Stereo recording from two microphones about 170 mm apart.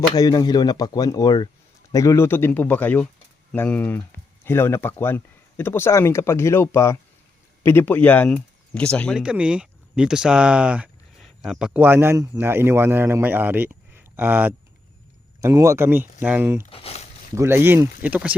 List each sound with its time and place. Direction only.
0.2 s speech: 25° left (ahead or behind); by 9.2 s 5° left (ahead or behind)
9.2 s speech: 5° right (ahead or behind)
16.6 s a sound: 35° left (ahead or behind)
17.3 s speech: 15° right (ahead or behind)